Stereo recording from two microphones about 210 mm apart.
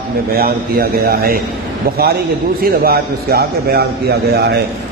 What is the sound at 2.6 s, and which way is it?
A man's voice, 45° right (ahead or behind).